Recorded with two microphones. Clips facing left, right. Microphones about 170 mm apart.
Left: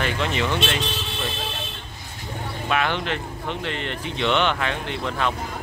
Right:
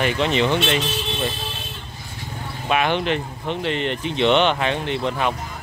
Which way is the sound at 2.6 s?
20° right (ahead or behind).